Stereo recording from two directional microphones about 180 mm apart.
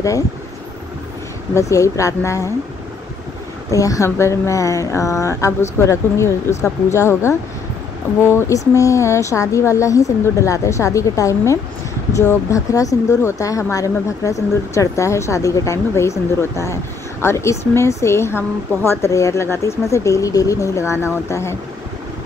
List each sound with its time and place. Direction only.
1.5 s speech: 15° left (ahead or behind)
3.7 s speech: 20° left (ahead or behind)